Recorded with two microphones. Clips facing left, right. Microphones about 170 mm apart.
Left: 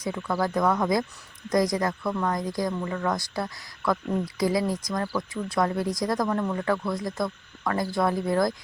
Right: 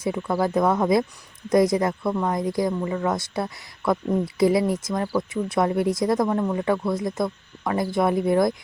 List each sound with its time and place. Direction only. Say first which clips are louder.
0.0 s speech: right 4 dB; 25° right (ahead or behind)